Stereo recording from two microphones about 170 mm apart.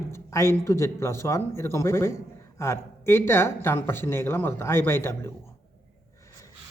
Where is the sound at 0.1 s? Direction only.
15° left (ahead or behind).